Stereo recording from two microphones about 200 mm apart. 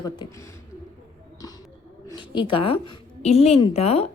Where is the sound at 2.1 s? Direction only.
25° left (ahead or behind).